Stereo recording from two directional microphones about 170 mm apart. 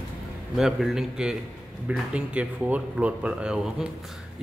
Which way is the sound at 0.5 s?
Centre (ahead or behind).